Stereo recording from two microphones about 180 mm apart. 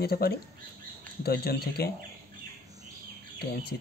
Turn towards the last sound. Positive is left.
turn(degrees=60)  # may be behind; listen again after turning